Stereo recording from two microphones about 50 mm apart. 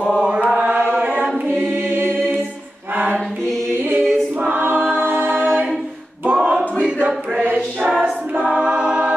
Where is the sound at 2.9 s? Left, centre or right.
Right.